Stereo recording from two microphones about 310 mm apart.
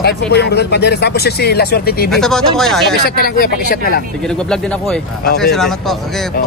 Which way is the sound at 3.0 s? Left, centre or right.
Left.